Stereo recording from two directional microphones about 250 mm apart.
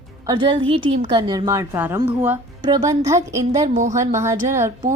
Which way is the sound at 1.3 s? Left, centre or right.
Centre.